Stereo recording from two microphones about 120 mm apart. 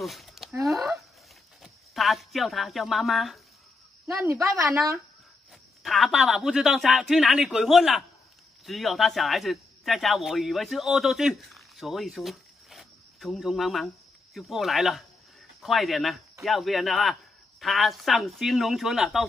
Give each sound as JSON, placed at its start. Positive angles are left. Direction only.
{"t": 0.0, "sound": "a sound", "side_deg": 0}
{"t": 1.6, "sound": "speech", "side_deg": 0}
{"t": 4.1, "sound": "a woman's voice", "side_deg": -25}
{"t": 5.8, "sound": "a man's voice", "side_deg": 0}